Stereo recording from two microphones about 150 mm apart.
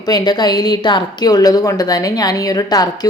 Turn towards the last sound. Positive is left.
turn(degrees=25)  # may be behind; listen again after turning